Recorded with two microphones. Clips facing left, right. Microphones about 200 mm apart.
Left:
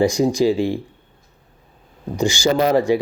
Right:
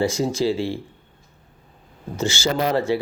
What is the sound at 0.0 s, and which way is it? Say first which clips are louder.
Speech: left 5 dB; 15° left (ahead or behind).